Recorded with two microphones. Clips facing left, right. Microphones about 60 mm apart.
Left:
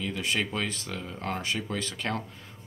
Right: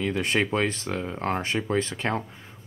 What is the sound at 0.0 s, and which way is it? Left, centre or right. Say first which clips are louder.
Speech: right 5 dB; right.